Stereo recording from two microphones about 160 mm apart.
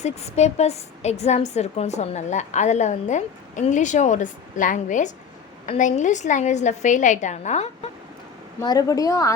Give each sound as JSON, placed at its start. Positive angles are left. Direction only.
{"t": 0.0, "sound": "a woman's voice", "side_deg": 45}
{"t": 8.6, "sound": "a woman's voice", "side_deg": 25}